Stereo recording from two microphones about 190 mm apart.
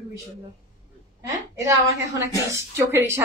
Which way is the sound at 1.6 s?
15° right (ahead or behind).